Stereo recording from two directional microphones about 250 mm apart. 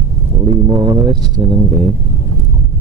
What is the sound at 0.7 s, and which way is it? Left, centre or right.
Speech, centre.